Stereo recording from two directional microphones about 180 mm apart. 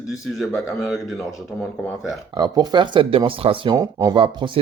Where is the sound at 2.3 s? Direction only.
25° right (ahead or behind).